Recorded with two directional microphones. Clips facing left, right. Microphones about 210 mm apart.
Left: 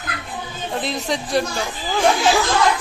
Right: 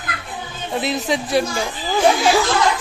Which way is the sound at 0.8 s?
5° right (ahead or behind).